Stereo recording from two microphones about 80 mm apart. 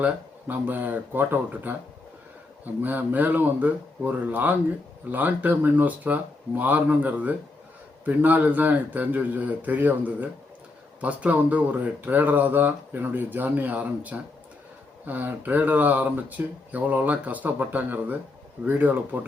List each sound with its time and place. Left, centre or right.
0.0 s speech: right
2.8 s speech: right